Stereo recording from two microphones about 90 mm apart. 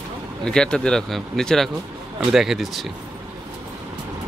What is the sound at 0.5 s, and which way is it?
Speech, 10° left (ahead or behind).